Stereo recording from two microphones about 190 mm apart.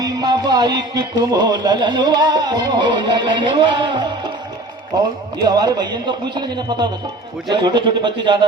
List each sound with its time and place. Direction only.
0.0 s a man's voice: 20° right (ahead or behind)
5.4 s a man's voice: 20° right (ahead or behind)